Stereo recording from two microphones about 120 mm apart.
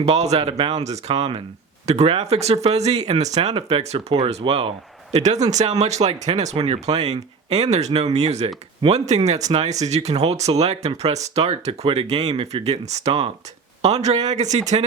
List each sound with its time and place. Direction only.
0.0 s speech: 65° right (ahead or behind)
3.5 s speech: 55° right (ahead or behind)
5.1 s speech: 75° right (ahead or behind)